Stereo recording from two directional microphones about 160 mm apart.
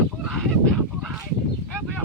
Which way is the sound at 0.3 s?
Centre (ahead or behind).